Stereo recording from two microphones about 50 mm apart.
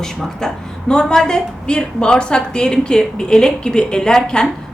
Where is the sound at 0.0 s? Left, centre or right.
Centre.